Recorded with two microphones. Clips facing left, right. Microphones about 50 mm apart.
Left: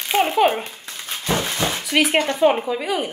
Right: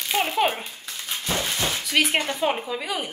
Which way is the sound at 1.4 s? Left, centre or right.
Left.